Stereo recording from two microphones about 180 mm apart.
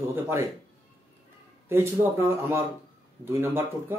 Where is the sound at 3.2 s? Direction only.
10° right (ahead or behind).